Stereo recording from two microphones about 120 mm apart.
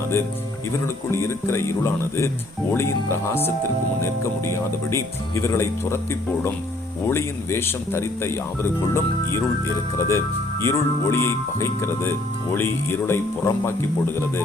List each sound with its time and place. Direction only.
1.1 s speech: 20° left (ahead or behind)